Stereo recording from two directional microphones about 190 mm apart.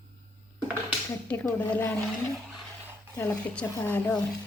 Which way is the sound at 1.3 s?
10° left (ahead or behind).